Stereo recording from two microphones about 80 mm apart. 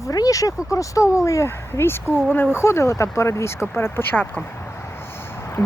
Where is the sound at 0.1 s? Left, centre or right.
Left.